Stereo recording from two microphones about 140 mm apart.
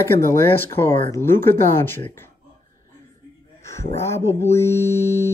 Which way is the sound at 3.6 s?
20° left (ahead or behind).